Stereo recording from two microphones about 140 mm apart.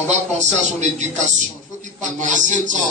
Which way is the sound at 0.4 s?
55° right (ahead or behind).